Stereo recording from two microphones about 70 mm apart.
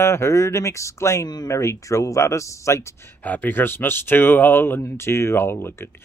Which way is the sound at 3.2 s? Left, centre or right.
Left.